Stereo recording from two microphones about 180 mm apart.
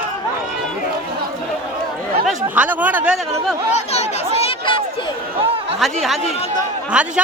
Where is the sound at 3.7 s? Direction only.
35° left (ahead or behind).